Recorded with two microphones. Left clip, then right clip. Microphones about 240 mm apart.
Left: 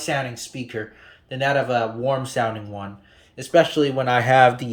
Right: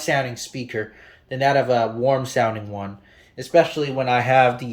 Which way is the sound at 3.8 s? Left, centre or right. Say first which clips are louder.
Left 1 dB; left.